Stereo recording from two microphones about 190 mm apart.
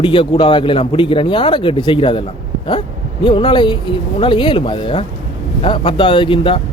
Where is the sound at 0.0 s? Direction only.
25° left (ahead or behind).